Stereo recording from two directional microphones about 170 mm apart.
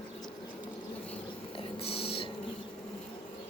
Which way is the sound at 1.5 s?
35° left (ahead or behind).